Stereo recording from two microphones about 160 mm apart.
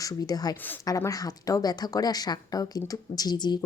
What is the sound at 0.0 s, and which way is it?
A woman's voice, 25° left (ahead or behind).